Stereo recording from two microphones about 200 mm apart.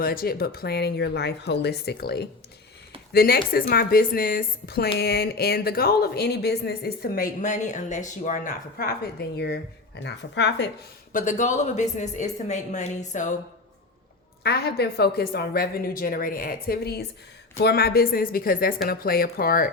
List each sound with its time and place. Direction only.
0.0 s a woman's voice: 50° left (ahead or behind)
11.1 s speech: 40° left (ahead or behind)
14.4 s speech: 55° left (ahead or behind)